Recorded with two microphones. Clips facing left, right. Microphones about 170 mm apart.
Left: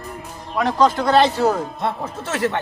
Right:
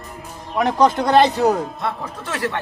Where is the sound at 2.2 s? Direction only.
25° left (ahead or behind).